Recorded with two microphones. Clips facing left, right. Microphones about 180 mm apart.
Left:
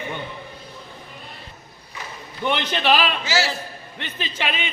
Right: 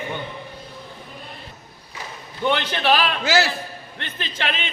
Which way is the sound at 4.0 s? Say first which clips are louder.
Left 1 dB; 10° left (ahead or behind).